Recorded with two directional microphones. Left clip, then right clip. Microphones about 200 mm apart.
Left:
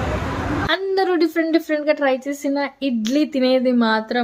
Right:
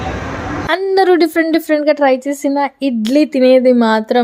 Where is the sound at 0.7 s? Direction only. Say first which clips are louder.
Right 8 dB; 40° right (ahead or behind).